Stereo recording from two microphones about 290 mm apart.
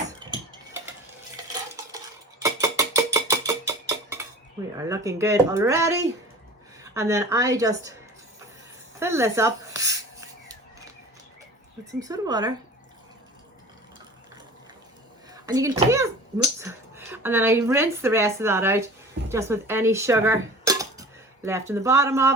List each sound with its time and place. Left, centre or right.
2.4 s a sound: centre
3.7 s music: centre
4.8 s a woman's voice: centre
9.0 s a sound: centre
11.9 s a woman's voice: centre
15.3 s a woman's voice: centre